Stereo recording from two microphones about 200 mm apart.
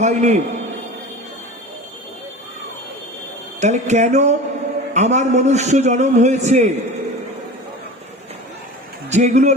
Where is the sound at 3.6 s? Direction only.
35° right (ahead or behind).